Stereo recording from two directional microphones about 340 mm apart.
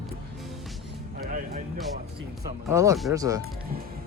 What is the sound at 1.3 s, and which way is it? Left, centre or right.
Music, right.